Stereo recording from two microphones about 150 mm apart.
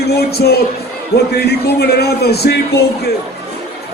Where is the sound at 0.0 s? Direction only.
90° left.